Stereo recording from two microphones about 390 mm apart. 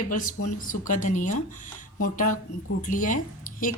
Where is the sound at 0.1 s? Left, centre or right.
Centre.